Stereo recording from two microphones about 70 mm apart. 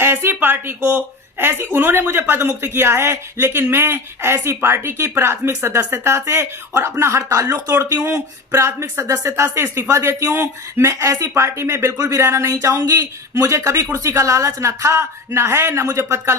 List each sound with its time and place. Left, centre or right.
0.0 s speech: right
7.9 s speech: right
8.5 s speech: right
12.8 s speech: right